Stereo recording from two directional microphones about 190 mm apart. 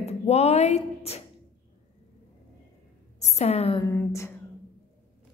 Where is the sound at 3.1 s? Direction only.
35° left (ahead or behind).